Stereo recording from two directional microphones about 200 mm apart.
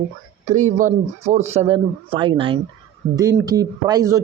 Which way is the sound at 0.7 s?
35° right (ahead or behind).